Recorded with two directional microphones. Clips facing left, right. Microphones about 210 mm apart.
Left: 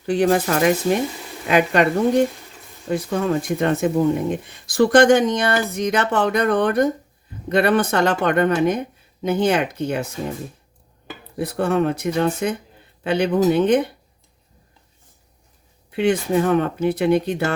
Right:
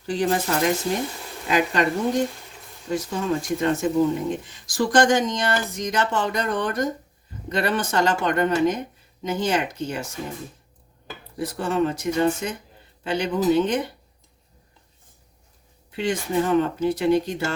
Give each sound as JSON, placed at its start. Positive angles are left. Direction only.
{"t": 0.0, "sound": "speech", "side_deg": 60}
{"t": 11.3, "sound": "speech", "side_deg": 60}
{"t": 15.9, "sound": "speech", "side_deg": 60}